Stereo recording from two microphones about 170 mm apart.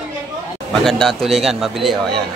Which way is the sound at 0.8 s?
Centre (ahead or behind).